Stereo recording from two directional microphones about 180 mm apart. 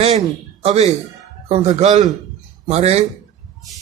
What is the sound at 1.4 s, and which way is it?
A man's voice, 35° right (ahead or behind).